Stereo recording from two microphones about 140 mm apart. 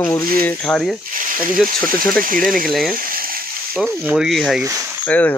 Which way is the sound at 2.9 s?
90° right.